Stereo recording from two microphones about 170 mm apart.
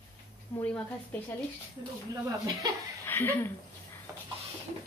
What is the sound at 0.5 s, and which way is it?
Speech, 10° left (ahead or behind).